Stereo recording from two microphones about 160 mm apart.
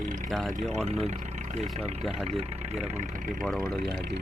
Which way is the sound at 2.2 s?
40° right (ahead or behind).